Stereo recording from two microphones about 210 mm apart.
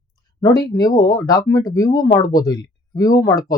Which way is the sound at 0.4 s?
20° left (ahead or behind).